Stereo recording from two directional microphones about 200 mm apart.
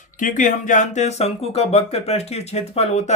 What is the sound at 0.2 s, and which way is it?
A man's voice, 40° left (ahead or behind).